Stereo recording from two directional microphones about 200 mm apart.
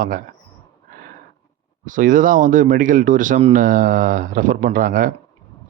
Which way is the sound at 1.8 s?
40° right (ahead or behind).